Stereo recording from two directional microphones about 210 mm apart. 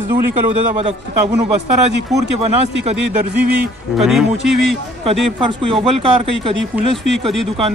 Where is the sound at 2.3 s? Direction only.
30° right (ahead or behind).